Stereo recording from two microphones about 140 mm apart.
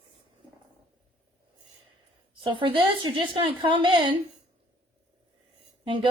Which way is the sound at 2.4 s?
35° right (ahead or behind).